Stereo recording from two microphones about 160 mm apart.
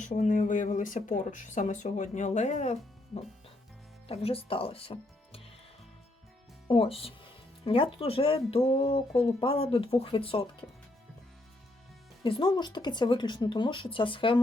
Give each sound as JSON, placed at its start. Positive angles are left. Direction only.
{"t": 0.0, "sound": "speech", "side_deg": 50}
{"t": 4.1, "sound": "speech", "side_deg": 35}
{"t": 6.7, "sound": "speech", "side_deg": 35}
{"t": 12.2, "sound": "speech", "side_deg": 30}